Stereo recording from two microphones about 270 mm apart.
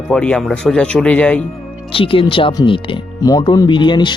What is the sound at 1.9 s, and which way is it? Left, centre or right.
Speech, centre.